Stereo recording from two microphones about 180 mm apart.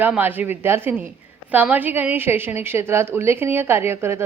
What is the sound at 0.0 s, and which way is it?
A woman's voice, 10° right (ahead or behind).